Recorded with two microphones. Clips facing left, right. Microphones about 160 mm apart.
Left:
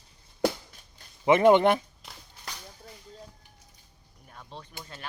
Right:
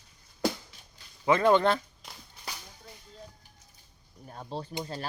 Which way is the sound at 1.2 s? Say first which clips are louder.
Left 4 dB; 20° left (ahead or behind).